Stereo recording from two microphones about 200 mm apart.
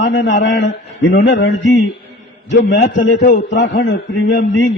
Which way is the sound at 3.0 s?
45° left (ahead or behind).